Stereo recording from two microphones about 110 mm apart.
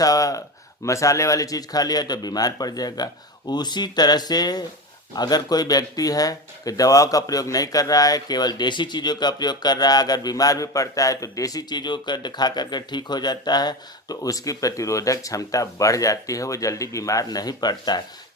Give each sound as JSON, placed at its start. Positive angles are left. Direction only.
{"t": 0.0, "sound": "speech", "side_deg": 30}